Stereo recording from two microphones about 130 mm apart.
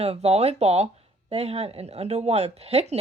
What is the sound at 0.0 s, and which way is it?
Speech, 50° right (ahead or behind).